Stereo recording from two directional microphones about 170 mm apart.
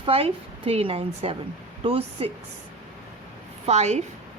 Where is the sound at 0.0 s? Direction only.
35° right (ahead or behind).